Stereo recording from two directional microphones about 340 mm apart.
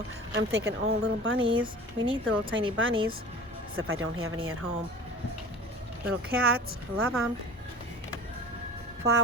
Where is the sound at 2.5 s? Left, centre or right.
Right.